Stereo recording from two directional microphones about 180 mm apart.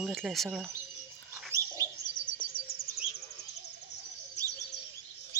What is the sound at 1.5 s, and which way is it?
Bird, 20° right (ahead or behind).